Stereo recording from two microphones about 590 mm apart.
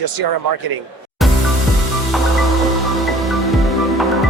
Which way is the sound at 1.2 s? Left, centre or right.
Centre.